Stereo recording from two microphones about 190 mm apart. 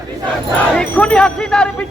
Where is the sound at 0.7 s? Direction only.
5° left (ahead or behind).